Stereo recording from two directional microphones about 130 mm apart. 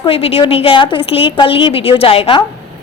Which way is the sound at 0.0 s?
45° left (ahead or behind).